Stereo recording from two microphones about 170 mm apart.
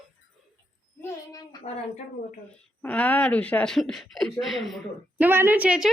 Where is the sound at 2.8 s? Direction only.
10° left (ahead or behind).